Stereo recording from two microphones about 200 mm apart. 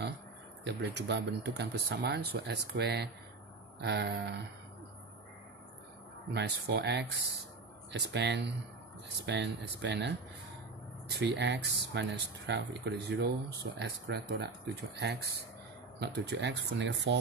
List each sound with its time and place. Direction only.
0.7 s speech: 60° right (ahead or behind)
6.3 s speech: 55° right (ahead or behind)
11.1 s speech: 60° right (ahead or behind)